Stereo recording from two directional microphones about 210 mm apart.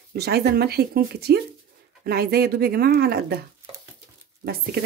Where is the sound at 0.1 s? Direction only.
50° right (ahead or behind).